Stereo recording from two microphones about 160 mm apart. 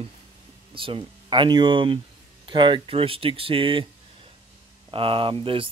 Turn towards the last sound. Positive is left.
turn(degrees=-35)  # may be behind; listen again after turning